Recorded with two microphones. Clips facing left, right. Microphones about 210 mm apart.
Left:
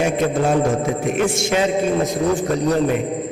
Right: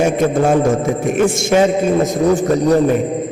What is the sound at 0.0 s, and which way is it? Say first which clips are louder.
A man's voice: right 4 dB; 45° right (ahead or behind).